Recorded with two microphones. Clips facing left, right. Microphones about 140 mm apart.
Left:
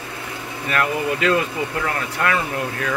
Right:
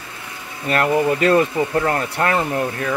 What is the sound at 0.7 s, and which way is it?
Speech, 35° right (ahead or behind).